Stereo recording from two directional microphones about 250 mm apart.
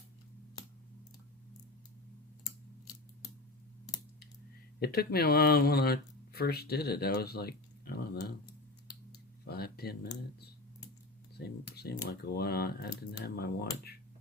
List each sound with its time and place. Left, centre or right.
4.8 s speech: left
9.5 s a sound: left
11.3 s speech: left